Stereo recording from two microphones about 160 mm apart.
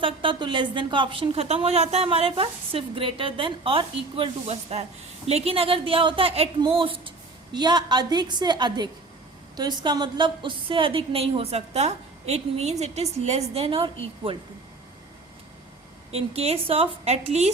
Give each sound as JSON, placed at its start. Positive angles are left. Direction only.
{"t": 0.0, "sound": "a woman's voice", "side_deg": -30}
{"t": 16.1, "sound": "a woman's voice", "side_deg": -40}